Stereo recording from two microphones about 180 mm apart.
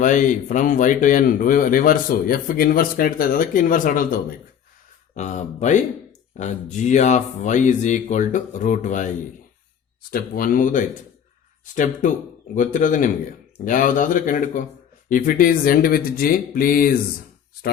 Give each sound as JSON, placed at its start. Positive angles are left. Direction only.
{"t": 0.0, "sound": "speech", "side_deg": 45}
{"t": 10.1, "sound": "speech", "side_deg": 55}